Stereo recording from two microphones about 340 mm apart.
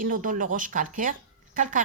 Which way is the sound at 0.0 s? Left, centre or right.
Right.